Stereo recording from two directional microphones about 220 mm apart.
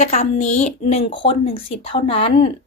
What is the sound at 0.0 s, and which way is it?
Speech, 30° left (ahead or behind).